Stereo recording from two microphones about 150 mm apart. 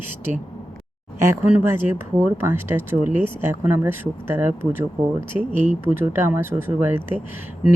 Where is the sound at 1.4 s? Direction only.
10° right (ahead or behind).